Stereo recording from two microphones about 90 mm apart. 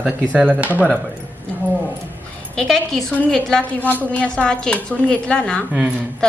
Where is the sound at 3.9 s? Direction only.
15° left (ahead or behind).